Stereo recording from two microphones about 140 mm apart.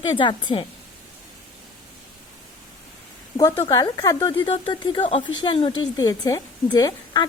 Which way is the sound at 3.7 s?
25° left (ahead or behind).